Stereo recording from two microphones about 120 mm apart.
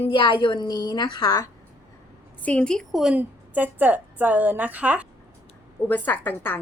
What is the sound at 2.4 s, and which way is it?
Speech, 10° left (ahead or behind).